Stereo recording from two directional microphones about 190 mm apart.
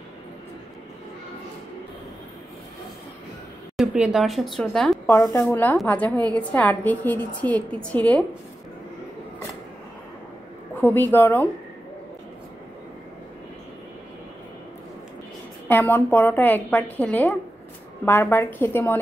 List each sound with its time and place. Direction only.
3.7 s a woman's voice: 5° right (ahead or behind)
5.1 s a woman's voice: 15° left (ahead or behind)
10.8 s a woman's voice: 10° left (ahead or behind)
15.7 s a woman's voice: 10° left (ahead or behind)